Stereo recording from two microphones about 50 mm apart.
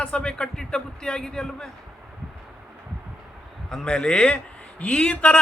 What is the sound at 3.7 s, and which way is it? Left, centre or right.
A man's voice, centre.